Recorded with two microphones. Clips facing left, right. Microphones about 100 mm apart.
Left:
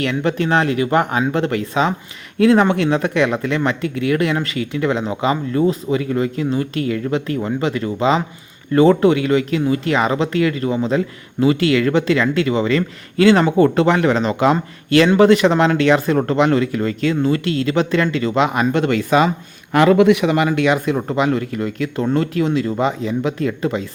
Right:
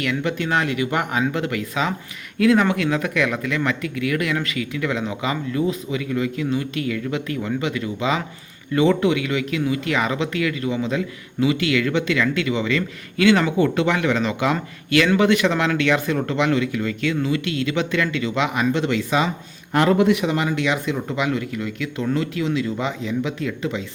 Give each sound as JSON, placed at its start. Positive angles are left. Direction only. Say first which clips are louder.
{"t": 0.0, "sound": "speech", "louder": "left 4 dB", "side_deg": 35}
{"t": 18.7, "sound": "speech", "louder": "left 5 dB", "side_deg": 50}
{"t": 19.7, "sound": "a man's voice", "louder": "left 5 dB", "side_deg": 90}
{"t": 20.5, "sound": "speech", "louder": "left 6 dB", "side_deg": 50}